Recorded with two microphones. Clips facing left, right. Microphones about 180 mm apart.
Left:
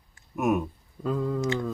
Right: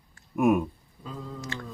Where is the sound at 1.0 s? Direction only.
60° left (ahead or behind).